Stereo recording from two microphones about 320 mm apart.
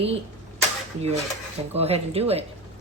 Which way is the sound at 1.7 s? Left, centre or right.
Centre.